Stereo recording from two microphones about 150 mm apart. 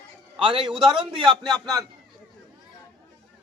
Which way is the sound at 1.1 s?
30° right (ahead or behind).